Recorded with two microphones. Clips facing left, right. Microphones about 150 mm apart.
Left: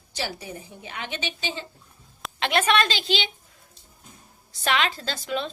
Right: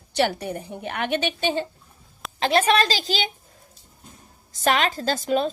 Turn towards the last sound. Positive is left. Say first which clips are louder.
# right 7 dB
turn(degrees=-45)  # may be behind; listen again after turning